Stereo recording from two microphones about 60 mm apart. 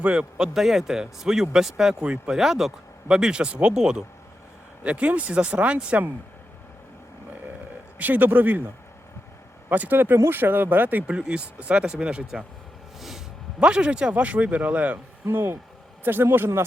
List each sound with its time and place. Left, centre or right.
0.0 s speech: centre
2.4 s speech: centre; by 6.1 s right
7.9 s speech: right
9.6 s speech: right
11.0 s speech: centre
13.0 s a sound: centre
13.7 s speech: centre
15.3 s speech: right